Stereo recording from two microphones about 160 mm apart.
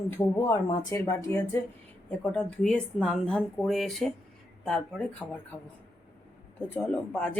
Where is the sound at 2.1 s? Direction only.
5° left (ahead or behind).